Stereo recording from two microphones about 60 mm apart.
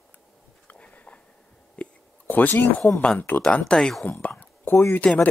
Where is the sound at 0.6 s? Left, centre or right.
Left.